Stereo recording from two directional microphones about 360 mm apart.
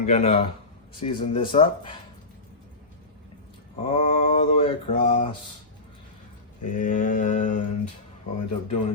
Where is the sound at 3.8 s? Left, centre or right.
Centre.